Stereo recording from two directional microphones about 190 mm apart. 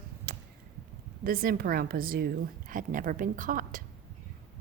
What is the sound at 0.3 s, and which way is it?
Arrow, 50° right (ahead or behind).